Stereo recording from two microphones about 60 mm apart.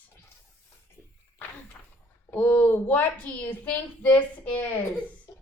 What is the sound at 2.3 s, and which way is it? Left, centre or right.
A woman's voice, left.